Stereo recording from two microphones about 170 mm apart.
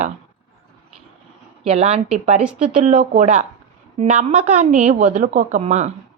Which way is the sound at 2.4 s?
5° right (ahead or behind).